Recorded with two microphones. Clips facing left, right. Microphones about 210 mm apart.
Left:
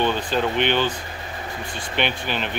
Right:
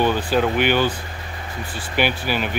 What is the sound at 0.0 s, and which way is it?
Speech, 10° right (ahead or behind).